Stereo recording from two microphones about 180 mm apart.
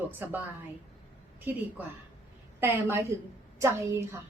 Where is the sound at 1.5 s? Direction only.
10° right (ahead or behind).